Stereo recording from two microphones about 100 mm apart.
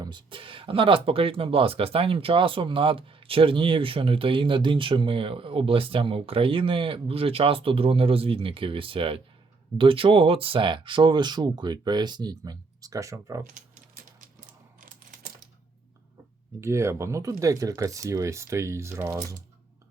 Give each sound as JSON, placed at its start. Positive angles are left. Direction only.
{"t": 0.0, "sound": "speech", "side_deg": -50}
{"t": 16.6, "sound": "speech", "side_deg": -30}